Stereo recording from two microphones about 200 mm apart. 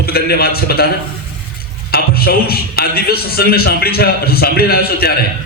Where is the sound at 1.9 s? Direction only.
50° left (ahead or behind).